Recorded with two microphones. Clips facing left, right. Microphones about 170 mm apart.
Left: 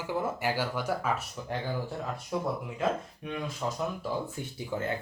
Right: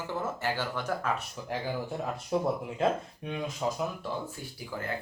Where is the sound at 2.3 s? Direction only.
25° right (ahead or behind).